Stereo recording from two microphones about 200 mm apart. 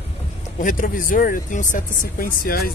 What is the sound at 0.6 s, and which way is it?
Speech, 40° left (ahead or behind).